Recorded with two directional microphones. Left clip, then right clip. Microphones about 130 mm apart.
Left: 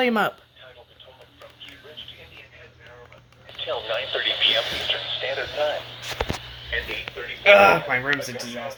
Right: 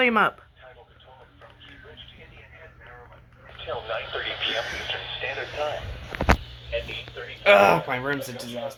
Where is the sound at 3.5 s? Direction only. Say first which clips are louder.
Left 4 dB; 65° left (ahead or behind).